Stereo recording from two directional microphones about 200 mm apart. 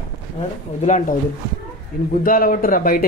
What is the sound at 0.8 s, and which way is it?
Speech, 40° left (ahead or behind).